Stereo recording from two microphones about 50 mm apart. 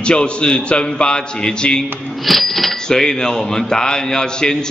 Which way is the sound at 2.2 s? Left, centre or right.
Centre.